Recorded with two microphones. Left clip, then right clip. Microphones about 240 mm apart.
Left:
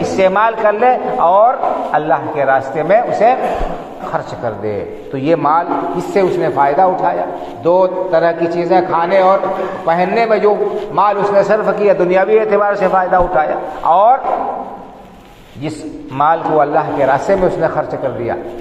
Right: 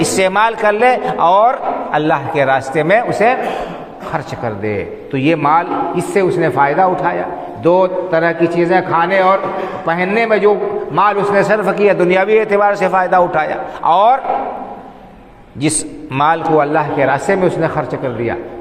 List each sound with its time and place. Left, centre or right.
0.0 s a man's voice: right
16.1 s a man's voice: right